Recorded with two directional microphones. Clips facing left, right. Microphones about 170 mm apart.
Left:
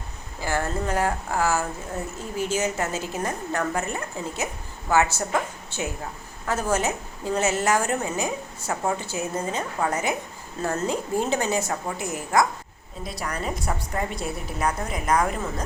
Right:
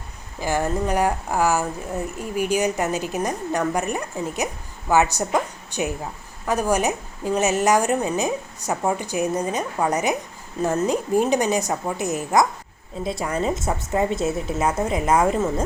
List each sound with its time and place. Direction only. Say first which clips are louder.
0.3 s a woman's voice: right 4 dB; 15° right (ahead or behind)